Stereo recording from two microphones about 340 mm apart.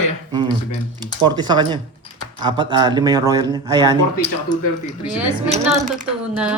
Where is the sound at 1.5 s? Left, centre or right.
Centre.